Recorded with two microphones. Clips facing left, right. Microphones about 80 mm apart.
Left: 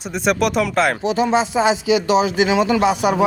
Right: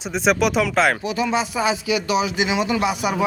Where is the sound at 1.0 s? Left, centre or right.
Left.